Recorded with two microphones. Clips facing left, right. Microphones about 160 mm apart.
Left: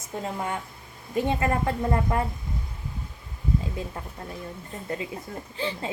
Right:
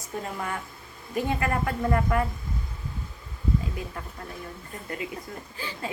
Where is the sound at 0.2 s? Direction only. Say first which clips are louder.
Left 2 dB; 25° left (ahead or behind).